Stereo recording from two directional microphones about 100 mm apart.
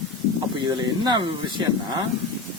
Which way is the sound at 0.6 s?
45° right (ahead or behind).